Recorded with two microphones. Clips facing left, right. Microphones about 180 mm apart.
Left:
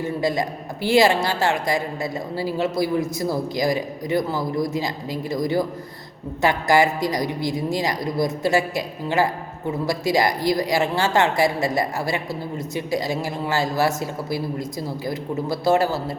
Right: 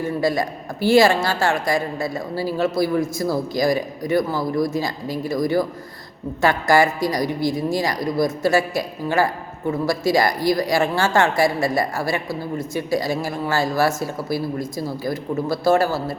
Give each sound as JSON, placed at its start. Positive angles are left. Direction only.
{"t": 0.0, "sound": "a woman's voice", "side_deg": 20}